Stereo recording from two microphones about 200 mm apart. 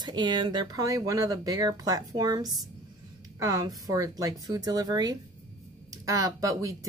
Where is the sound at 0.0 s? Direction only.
20° right (ahead or behind).